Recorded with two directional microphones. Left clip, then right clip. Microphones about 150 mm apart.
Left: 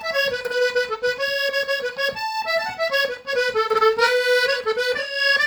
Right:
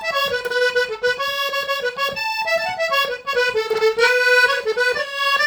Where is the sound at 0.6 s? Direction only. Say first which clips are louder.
Right 2 dB; 25° right (ahead or behind).